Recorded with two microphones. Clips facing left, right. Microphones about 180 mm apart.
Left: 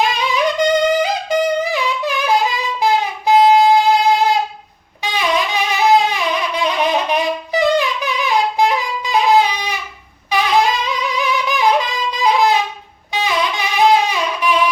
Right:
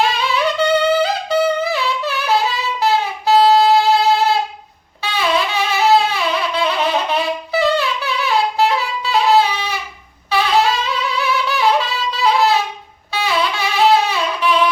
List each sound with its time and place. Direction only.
0.0 s music: 15° left (ahead or behind)
5.0 s wind instrument: 15° left (ahead or behind)